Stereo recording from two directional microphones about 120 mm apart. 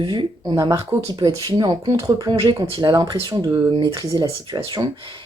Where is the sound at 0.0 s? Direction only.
40° right (ahead or behind).